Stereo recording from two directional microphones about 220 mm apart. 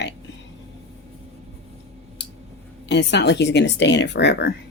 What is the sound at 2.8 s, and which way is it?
Speech, 50° left (ahead or behind).